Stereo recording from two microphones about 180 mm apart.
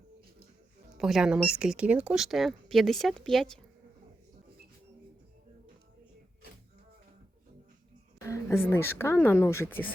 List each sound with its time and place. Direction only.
0.9 s speech: centre (ahead or behind)
8.3 s speech: 15° left (ahead or behind)